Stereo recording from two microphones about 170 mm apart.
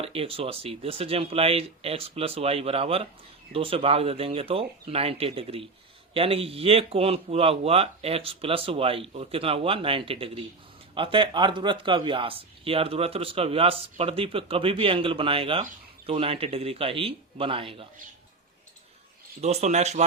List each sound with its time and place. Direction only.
0.0 s speech: 35° right (ahead or behind)
19.4 s speech: 40° right (ahead or behind)